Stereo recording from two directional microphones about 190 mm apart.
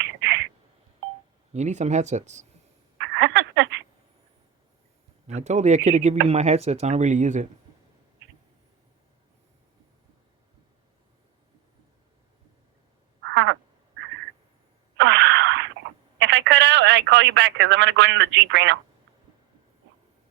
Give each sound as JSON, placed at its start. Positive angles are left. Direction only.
{"t": 0.0, "sound": "a sound", "side_deg": -70}
{"t": 1.5, "sound": "speech", "side_deg": -35}
{"t": 3.0, "sound": "a sound", "side_deg": -70}
{"t": 5.2, "sound": "speech", "side_deg": -35}
{"t": 13.2, "sound": "frog", "side_deg": -70}
{"t": 14.9, "sound": "wail", "side_deg": -65}
{"t": 16.1, "sound": "telephone", "side_deg": -70}